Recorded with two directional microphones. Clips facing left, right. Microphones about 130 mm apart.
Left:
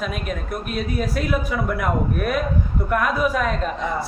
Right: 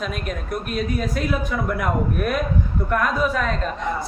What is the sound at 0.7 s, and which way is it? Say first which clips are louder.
A man's voice: even; centre (ahead or behind).